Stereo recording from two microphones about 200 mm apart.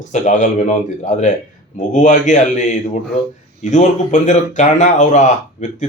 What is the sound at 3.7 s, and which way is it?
Speech, 35° left (ahead or behind).